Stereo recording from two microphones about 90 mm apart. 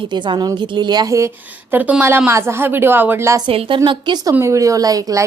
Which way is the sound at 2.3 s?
30° right (ahead or behind).